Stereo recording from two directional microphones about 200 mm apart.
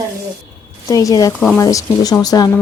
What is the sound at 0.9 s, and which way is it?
Speech, 15° left (ahead or behind).